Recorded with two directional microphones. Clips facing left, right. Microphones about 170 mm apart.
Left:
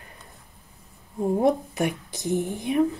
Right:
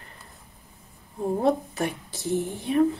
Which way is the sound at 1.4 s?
15° left (ahead or behind).